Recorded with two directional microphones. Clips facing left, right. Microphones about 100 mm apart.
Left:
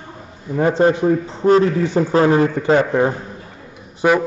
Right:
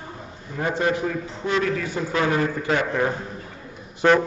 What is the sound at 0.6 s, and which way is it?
A man's voice, 30° left (ahead or behind).